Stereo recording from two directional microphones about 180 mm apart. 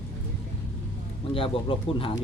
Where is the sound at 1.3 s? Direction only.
30° left (ahead or behind).